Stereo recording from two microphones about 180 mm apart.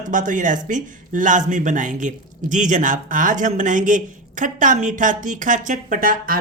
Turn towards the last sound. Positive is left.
turn(degrees=-50)  # may be behind; listen again after turning